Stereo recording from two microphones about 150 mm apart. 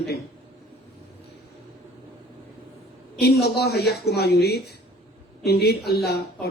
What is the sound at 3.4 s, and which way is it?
A woman's voice, 90° left.